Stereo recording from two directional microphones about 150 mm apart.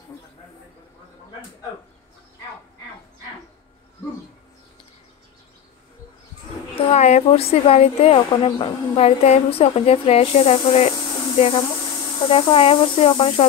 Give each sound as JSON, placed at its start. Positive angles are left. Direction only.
{"t": 6.7, "sound": "a woman's voice", "side_deg": 45}